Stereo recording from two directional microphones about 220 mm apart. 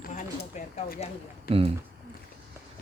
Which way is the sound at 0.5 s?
30° left (ahead or behind).